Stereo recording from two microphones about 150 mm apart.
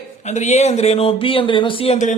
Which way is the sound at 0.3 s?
50° left (ahead or behind).